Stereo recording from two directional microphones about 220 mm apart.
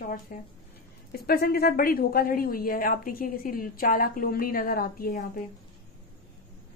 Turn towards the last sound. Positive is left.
turn(degrees=40)  # may be behind; listen again after turning